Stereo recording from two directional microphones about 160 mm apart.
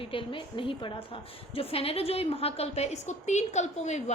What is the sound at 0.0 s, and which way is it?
A woman's voice, 35° left (ahead or behind).